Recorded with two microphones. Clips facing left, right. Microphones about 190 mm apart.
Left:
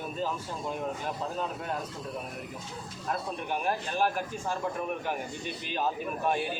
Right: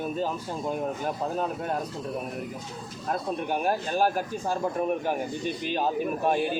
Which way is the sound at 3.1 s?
40° right (ahead or behind).